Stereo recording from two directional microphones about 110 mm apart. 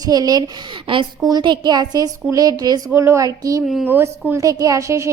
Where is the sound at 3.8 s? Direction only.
20° right (ahead or behind).